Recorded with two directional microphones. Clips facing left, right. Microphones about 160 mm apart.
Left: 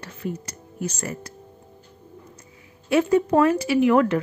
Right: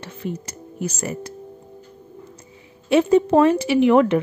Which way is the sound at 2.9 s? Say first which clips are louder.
Right 3 dB; 25° right (ahead or behind).